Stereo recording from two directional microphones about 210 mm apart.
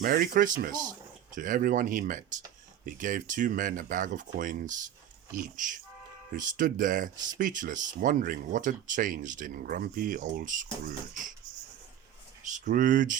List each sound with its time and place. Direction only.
0.0 s speech: 40° right (ahead or behind)
12.4 s speech: 35° right (ahead or behind)